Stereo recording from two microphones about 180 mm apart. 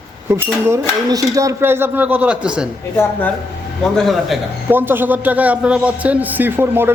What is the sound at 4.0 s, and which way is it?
Speech, centre (ahead or behind).